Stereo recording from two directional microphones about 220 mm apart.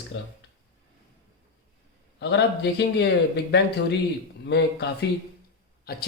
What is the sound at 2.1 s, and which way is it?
Speech, 50° left (ahead or behind).